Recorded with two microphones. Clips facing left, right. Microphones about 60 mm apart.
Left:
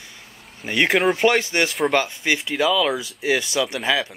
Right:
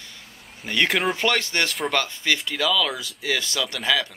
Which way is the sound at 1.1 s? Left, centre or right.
Centre.